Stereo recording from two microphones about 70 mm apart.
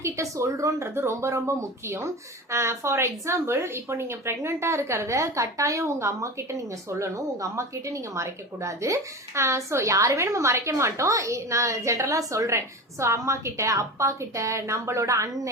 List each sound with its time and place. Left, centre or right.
0.0 s speech: right